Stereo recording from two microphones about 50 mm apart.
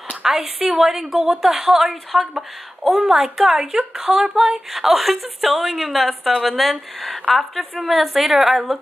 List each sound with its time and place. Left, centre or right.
0.1 s a woman's voice: centre